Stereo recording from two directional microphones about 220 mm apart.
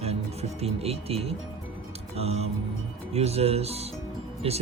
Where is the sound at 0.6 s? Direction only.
25° right (ahead or behind).